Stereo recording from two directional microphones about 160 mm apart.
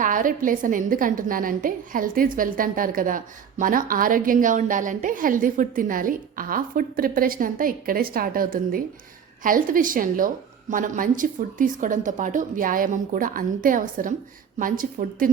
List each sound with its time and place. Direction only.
0.0 s a woman's voice: 55° right (ahead or behind)